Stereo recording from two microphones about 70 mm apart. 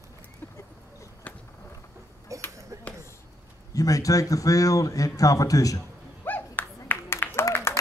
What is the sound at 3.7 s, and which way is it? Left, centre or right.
Speech, left.